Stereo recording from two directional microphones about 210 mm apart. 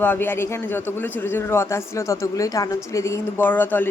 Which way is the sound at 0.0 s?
10° left (ahead or behind).